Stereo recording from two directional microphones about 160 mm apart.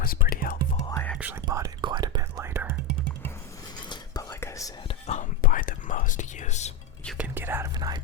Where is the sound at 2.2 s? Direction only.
15° right (ahead or behind).